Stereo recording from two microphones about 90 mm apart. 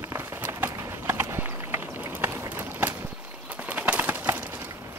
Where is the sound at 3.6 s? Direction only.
15° right (ahead or behind).